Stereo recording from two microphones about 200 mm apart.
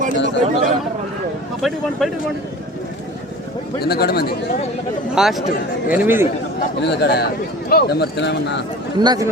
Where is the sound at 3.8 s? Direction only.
50° left (ahead or behind).